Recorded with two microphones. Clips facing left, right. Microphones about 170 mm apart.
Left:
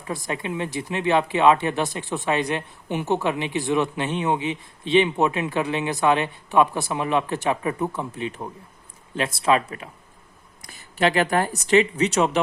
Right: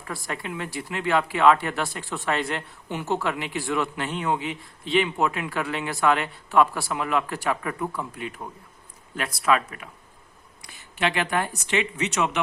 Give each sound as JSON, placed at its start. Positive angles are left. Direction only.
{"t": 0.0, "sound": "speech", "side_deg": 20}